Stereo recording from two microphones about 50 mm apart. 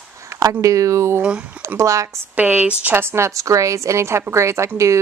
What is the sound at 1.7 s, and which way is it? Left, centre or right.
Speech, right.